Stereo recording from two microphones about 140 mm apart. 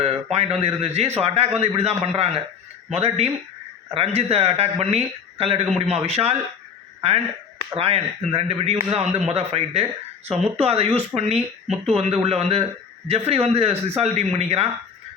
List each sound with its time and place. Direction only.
0.0 s speech: 50° right (ahead or behind)
7.8 s speech: 45° right (ahead or behind)